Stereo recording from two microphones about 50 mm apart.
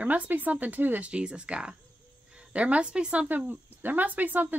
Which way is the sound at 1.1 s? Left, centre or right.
Centre.